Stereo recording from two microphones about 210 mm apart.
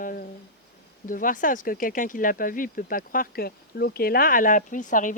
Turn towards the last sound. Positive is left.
turn(degrees=40)  # may be behind; listen again after turning